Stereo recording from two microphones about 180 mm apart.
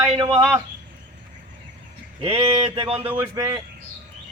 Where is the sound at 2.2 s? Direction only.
30° right (ahead or behind).